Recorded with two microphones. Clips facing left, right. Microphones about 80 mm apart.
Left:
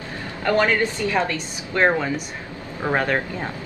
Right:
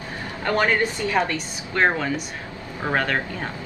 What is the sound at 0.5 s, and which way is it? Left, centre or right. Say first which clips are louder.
Speech: left 2 dB; right.